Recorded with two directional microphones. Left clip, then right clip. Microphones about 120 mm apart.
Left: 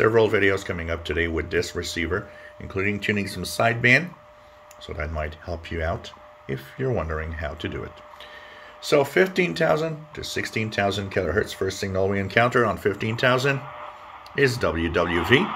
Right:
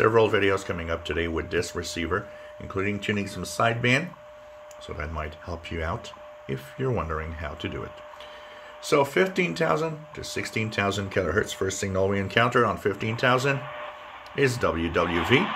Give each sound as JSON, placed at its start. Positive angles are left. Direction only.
{"t": 0.0, "sound": "speech", "side_deg": 5}
{"t": 13.6, "sound": "a sound", "side_deg": -35}
{"t": 14.3, "sound": "speech", "side_deg": 5}